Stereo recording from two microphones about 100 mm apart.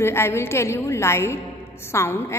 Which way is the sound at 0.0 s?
25° left (ahead or behind).